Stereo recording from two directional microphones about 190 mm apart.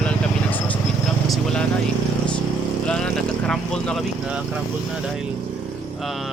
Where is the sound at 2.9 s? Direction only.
5° left (ahead or behind).